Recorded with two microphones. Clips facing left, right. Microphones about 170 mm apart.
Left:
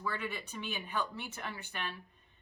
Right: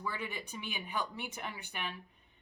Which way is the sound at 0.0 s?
15° right (ahead or behind).